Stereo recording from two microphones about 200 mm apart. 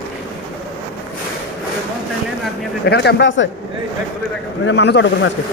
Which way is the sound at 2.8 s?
55° left (ahead or behind).